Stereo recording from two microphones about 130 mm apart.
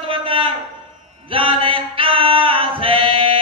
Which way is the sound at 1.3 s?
45° right (ahead or behind).